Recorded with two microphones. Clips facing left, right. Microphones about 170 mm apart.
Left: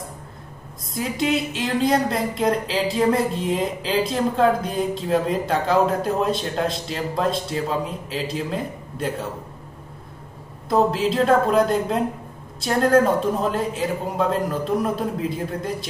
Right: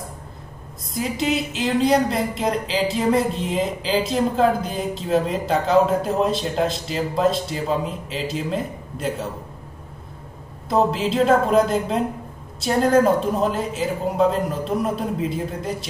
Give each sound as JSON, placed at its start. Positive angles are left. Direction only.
{"t": 0.9, "sound": "speech", "side_deg": 0}
{"t": 10.7, "sound": "speech", "side_deg": 0}